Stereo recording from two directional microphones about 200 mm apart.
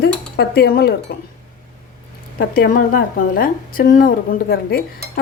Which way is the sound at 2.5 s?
45° left (ahead or behind).